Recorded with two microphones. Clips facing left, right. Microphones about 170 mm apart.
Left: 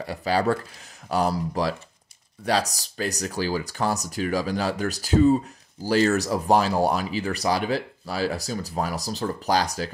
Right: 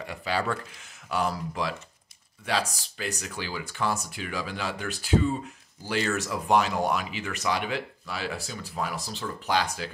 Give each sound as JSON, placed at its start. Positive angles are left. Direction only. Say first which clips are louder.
{"t": 0.0, "sound": "speech", "louder": "left 6 dB", "side_deg": 35}